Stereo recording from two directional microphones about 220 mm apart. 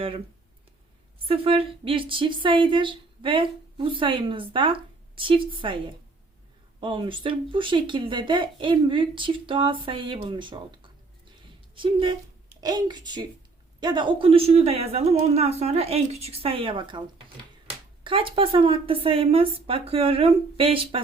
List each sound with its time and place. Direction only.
1.3 s a woman's voice: 25° right (ahead or behind)
11.7 s a woman's voice: 25° right (ahead or behind)
18.0 s a woman's voice: 25° right (ahead or behind)